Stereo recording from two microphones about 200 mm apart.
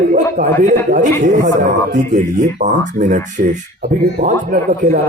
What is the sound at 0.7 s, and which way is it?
Speech, 40° right (ahead or behind).